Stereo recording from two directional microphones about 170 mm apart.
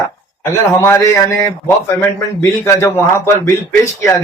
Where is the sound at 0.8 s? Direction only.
15° left (ahead or behind).